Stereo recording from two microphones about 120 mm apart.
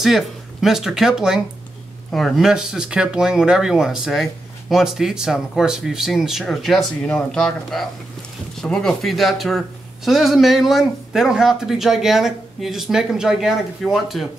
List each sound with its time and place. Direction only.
0.0 s speech: centre (ahead or behind)